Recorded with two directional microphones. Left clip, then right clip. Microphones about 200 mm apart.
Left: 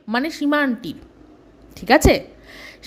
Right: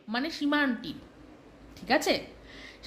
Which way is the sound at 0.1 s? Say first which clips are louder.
Left 9 dB; 40° left (ahead or behind).